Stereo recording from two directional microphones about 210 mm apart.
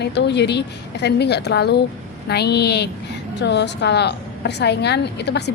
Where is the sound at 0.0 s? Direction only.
55° left (ahead or behind).